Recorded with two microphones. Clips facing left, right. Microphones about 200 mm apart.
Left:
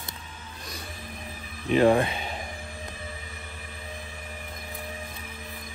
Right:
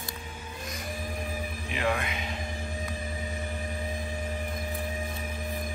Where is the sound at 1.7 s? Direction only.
35° left (ahead or behind).